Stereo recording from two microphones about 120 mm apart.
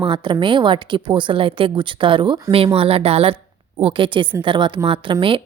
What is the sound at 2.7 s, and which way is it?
Speech, 55° right (ahead or behind).